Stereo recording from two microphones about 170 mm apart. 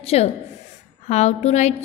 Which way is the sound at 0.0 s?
35° left (ahead or behind).